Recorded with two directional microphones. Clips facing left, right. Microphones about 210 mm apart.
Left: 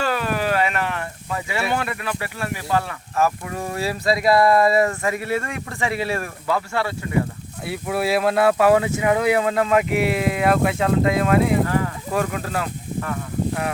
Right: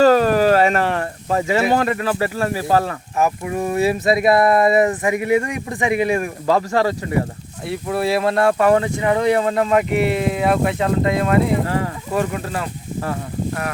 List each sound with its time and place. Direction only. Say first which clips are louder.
0.0 s a sound: right 10 dB; 40° right (ahead or behind)
3.2 s speech: right 2 dB; 15° right (ahead or behind)
6.5 s speech: right 6 dB; 40° right (ahead or behind)
7.7 s speech: right 2 dB; 5° left (ahead or behind)
11.6 s a sound: even; 30° right (ahead or behind)
12.1 s speech: right 2 dB; centre (ahead or behind)